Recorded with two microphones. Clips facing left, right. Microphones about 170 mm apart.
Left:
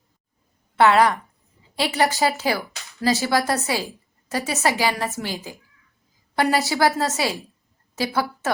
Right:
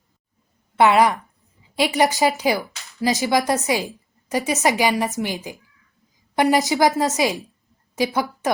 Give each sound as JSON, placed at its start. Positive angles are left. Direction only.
{"t": 0.8, "sound": "a woman's voice", "side_deg": -10}